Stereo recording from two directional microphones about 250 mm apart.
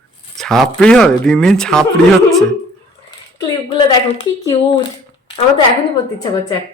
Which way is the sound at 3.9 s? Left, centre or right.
Left.